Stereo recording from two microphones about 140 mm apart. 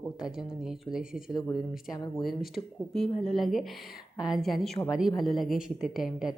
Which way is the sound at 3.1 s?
45° left (ahead or behind).